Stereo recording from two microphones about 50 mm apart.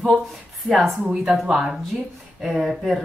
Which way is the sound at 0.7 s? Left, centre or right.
Centre.